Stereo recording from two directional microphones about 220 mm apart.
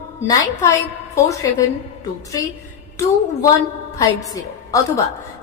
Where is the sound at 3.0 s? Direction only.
15° left (ahead or behind).